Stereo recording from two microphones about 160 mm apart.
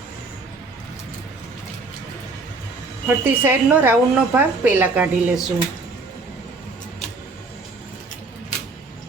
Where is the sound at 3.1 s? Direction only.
10° right (ahead or behind).